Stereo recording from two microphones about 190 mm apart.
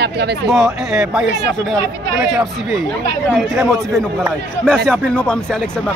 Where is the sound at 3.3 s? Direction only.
Centre (ahead or behind).